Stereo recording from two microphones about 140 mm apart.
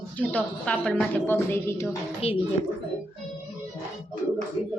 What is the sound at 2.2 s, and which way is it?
Speech, 45° left (ahead or behind).